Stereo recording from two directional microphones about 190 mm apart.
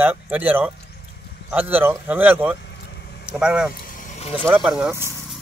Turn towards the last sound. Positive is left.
turn(degrees=-10)  # may be behind; listen again after turning